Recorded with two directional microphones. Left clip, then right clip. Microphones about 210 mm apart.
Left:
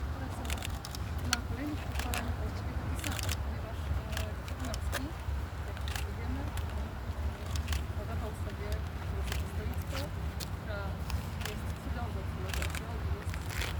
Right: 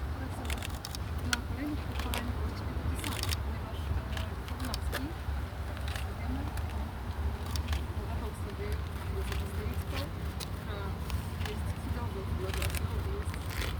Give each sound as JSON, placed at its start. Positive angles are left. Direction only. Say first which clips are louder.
{"t": 1.3, "sound": "vehicle", "louder": "even", "side_deg": 40}